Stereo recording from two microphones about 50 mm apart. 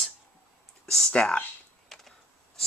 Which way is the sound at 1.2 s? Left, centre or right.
Left.